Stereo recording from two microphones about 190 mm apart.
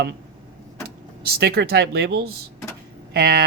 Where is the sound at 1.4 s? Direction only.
55° right (ahead or behind).